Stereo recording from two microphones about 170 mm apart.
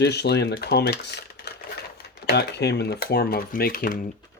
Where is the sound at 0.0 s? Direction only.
75° left (ahead or behind).